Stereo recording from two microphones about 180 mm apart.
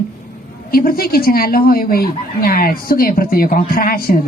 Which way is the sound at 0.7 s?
55° left (ahead or behind).